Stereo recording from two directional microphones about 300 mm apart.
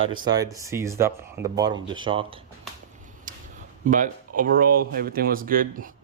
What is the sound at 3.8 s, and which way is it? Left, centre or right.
Speech, right.